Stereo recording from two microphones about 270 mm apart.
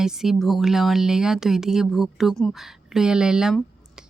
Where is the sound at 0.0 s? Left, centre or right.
Centre.